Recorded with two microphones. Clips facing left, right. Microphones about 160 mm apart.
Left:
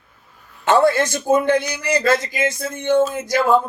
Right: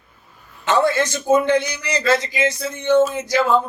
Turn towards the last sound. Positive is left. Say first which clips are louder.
# left 1 dB
turn(degrees=50)  # may be behind; listen again after turning